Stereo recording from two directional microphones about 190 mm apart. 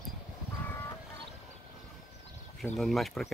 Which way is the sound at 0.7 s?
10° left (ahead or behind).